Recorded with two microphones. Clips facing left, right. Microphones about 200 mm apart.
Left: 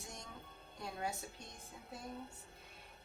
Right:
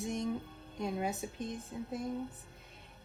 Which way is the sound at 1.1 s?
50° right (ahead or behind).